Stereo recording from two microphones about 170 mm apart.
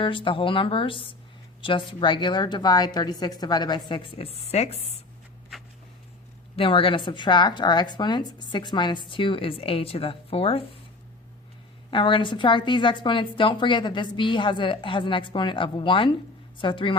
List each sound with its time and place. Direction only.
0.0 s a woman's voice: 30° left (ahead or behind)
6.6 s a woman's voice: 30° left (ahead or behind)
11.9 s a woman's voice: 30° left (ahead or behind)